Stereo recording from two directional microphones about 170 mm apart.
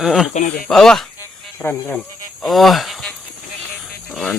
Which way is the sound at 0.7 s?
Centre (ahead or behind).